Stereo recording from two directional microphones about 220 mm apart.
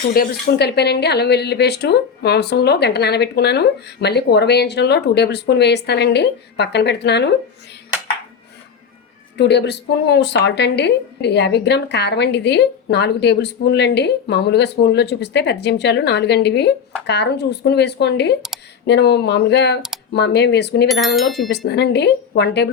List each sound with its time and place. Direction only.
0.1 s speech: 45° left (ahead or behind)
9.4 s speech: 50° left (ahead or behind)
20.8 s speech: centre (ahead or behind)
21.5 s speech: 50° left (ahead or behind)